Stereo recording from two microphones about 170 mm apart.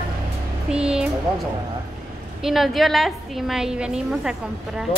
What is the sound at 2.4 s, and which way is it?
A woman's voice, centre (ahead or behind).